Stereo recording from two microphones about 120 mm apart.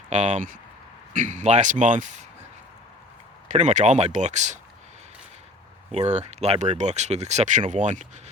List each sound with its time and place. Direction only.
0.1 s a man's voice: 75° right (ahead or behind)
3.5 s speech: 85° right
5.9 s speech: 65° right (ahead or behind); by 8.0 s 90° right